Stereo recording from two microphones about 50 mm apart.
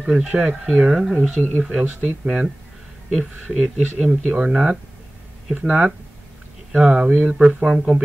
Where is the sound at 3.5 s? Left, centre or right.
Centre.